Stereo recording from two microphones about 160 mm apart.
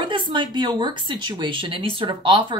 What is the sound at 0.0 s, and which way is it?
Speech, 30° right (ahead or behind).